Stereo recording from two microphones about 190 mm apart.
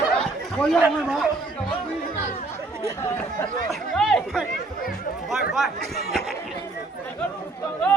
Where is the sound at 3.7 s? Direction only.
Centre (ahead or behind).